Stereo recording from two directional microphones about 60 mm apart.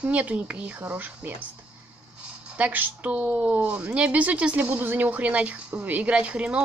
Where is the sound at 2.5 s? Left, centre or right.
Right.